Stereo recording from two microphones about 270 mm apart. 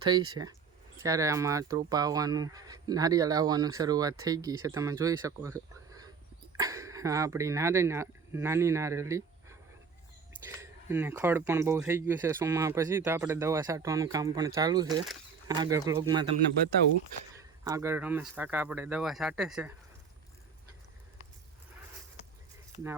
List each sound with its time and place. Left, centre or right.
1.0 s speech: centre
10.6 s speech: centre
17.6 s speech: centre